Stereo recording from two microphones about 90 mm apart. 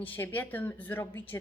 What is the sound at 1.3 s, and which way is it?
Speech, 35° left (ahead or behind).